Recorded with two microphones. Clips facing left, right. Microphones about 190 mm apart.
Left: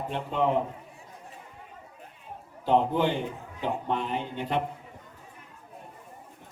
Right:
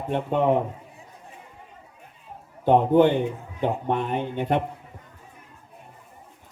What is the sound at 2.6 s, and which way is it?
A man's voice, 55° right (ahead or behind).